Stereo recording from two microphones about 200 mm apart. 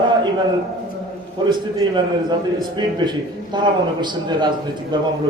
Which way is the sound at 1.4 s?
20° right (ahead or behind).